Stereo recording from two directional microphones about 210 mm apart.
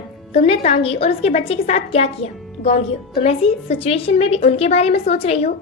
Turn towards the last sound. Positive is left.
turn(degrees=30)  # may be behind; listen again after turning